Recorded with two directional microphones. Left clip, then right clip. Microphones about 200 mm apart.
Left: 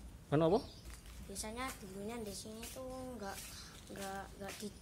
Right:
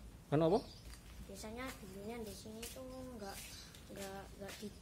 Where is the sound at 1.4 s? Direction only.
40° left (ahead or behind).